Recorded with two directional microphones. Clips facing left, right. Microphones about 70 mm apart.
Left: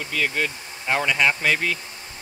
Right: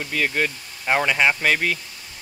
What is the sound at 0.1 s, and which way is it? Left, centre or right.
Speech, centre.